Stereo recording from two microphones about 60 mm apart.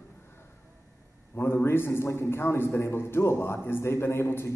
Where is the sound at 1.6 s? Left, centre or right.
Left.